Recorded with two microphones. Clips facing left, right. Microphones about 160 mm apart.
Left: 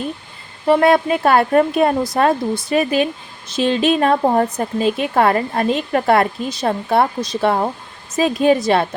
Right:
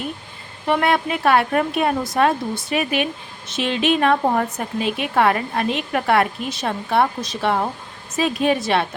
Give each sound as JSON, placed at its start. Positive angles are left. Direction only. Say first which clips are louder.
{"t": 0.7, "sound": "speech", "louder": "left 6 dB", "side_deg": 35}